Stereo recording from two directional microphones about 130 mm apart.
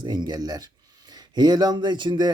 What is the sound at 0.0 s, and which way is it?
Speech, 35° right (ahead or behind).